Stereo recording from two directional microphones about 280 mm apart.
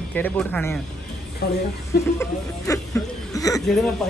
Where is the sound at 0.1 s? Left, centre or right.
Centre.